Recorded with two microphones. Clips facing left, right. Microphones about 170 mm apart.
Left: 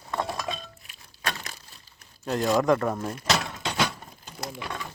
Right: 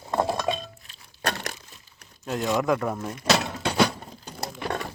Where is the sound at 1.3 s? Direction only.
65° right (ahead or behind).